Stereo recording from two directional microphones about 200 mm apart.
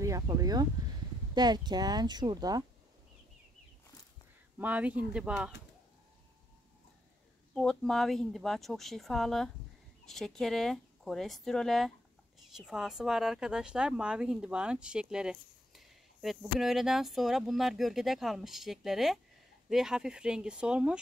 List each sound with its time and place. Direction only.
0.0 s speech: 15° right (ahead or behind)
4.6 s speech: 5° right (ahead or behind)
7.5 s speech: centre (ahead or behind)